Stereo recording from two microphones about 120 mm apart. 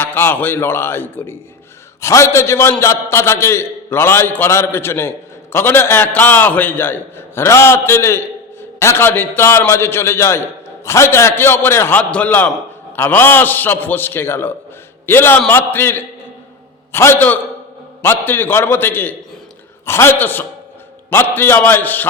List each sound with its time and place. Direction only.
0.0 s a man's voice: 20° left (ahead or behind)